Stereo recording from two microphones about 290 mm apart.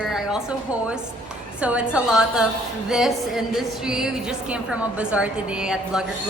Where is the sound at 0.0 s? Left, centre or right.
Centre.